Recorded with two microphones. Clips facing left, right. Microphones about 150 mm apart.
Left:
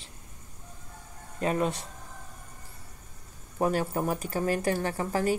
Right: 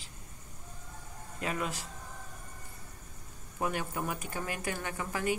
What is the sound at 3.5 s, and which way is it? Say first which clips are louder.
Speech: left 7 dB; 35° left (ahead or behind).